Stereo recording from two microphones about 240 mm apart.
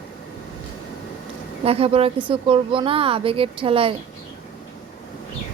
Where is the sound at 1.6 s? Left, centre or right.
Right.